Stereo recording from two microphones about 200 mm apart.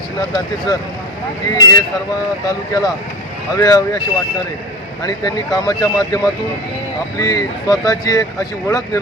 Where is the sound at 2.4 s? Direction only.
20° left (ahead or behind).